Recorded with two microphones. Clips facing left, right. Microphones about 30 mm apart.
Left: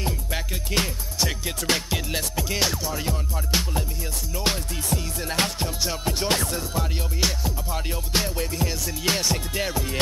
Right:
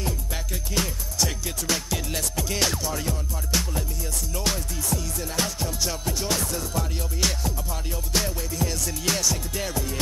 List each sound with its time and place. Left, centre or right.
0.7 s music: left
1.2 s music: left
2.0 s music: left
4.5 s music: left
5.3 s music: left
6.7 s music: centre
8.6 s music: left
9.0 s music: left